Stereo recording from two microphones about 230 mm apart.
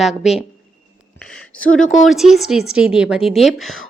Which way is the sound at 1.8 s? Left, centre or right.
Left.